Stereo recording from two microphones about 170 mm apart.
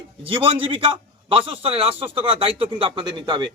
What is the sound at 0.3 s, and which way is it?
A man's voice, 30° right (ahead or behind).